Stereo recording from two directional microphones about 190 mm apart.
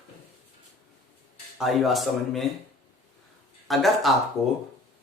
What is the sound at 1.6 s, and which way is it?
Speech, centre (ahead or behind).